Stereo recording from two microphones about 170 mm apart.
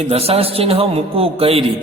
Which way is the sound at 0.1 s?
35° right (ahead or behind).